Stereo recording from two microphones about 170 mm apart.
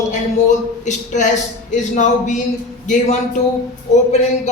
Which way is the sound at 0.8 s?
45° left (ahead or behind).